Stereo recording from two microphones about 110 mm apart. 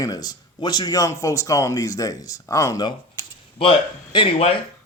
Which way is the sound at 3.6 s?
50° left (ahead or behind).